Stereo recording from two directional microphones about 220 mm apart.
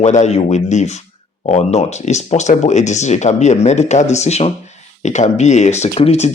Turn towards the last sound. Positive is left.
turn(degrees=30)  # may be behind; listen again after turning